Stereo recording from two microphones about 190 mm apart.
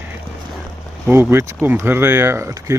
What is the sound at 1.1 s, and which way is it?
Speech, 15° right (ahead or behind).